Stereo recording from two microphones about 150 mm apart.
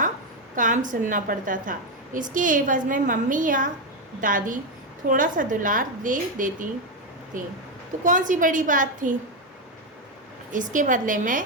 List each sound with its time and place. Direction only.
0.5 s a woman's voice: 60° right (ahead or behind)
10.5 s a woman's voice: 60° right (ahead or behind)